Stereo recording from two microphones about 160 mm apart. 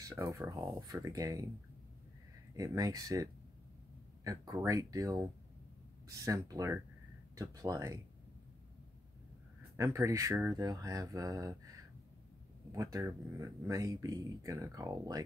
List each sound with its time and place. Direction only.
0.0 s speech: 20° right (ahead or behind)
2.5 s speech: 20° right (ahead or behind)
9.8 s speech: 20° right (ahead or behind)
12.7 s speech: 20° right (ahead or behind)